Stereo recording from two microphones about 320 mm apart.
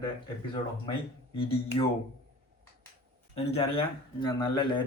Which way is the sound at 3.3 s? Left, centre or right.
Centre.